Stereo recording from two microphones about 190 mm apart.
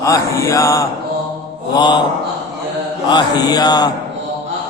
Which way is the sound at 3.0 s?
20° left (ahead or behind).